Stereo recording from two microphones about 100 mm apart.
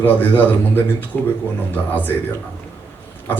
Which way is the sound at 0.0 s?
20° left (ahead or behind).